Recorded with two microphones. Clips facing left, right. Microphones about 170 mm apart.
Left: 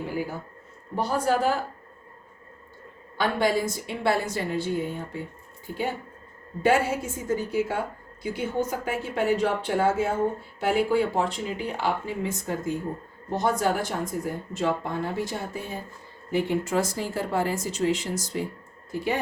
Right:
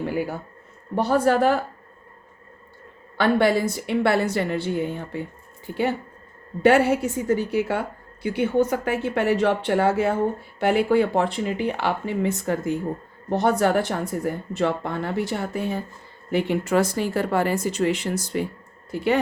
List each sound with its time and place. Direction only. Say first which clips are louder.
0.9 s speech: right 5 dB; 60° right (ahead or behind)
3.2 s speech: right 5 dB; 65° right (ahead or behind)
6.6 s speech: right 5 dB; 70° right (ahead or behind)